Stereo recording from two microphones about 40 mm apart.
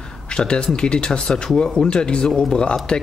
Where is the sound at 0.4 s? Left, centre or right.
Left.